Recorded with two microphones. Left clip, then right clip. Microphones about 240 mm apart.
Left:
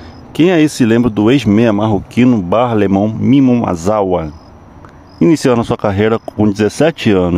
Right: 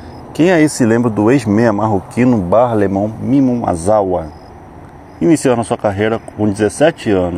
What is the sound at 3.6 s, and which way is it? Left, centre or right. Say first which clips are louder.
Speech: right 1 dB; left.